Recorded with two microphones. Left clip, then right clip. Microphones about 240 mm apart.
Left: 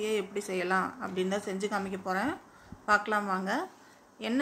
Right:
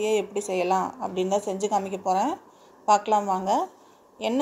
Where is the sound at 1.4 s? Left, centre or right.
Centre.